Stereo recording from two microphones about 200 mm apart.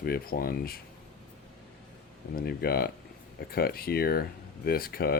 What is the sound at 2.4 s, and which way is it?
Speech, 50° left (ahead or behind).